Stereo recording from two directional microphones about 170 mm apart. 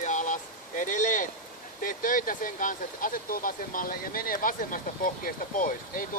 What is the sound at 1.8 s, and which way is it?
Speech, 50° left (ahead or behind).